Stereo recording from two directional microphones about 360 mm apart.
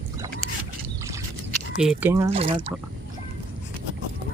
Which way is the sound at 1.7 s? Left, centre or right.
Centre.